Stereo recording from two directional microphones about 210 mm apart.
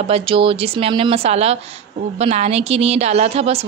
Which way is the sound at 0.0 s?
25° right (ahead or behind).